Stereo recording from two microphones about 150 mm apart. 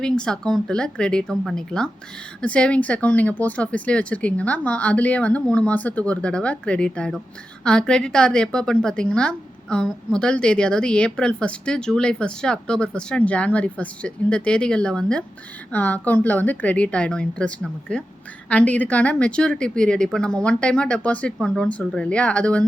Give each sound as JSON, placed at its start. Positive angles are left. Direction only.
{"t": 0.0, "sound": "a woman's voice", "side_deg": 5}